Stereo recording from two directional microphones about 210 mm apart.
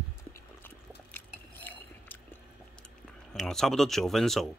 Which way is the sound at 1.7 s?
10° left (ahead or behind).